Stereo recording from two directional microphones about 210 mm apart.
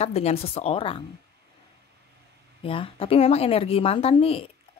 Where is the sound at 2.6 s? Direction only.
25° left (ahead or behind).